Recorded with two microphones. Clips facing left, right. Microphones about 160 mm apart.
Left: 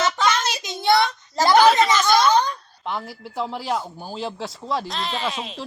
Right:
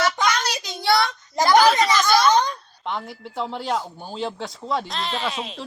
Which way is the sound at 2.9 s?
5° left (ahead or behind).